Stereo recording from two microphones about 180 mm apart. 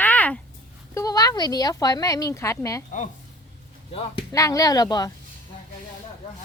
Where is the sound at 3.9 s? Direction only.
30° left (ahead or behind).